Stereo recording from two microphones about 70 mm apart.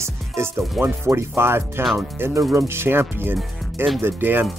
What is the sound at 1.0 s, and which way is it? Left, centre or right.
Speech, right.